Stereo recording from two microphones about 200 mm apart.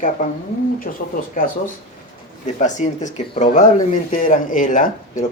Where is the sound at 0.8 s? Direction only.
45° left (ahead or behind).